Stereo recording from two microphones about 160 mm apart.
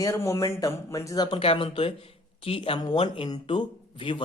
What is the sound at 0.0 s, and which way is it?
Speech, 20° left (ahead or behind).